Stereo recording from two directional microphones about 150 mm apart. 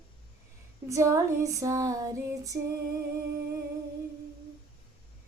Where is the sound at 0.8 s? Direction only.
20° right (ahead or behind).